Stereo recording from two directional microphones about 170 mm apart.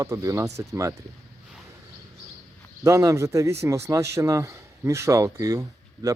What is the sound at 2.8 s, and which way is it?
A man's voice, 20° right (ahead or behind).